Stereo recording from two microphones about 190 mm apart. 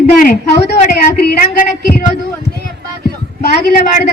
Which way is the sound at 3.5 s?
50° left (ahead or behind).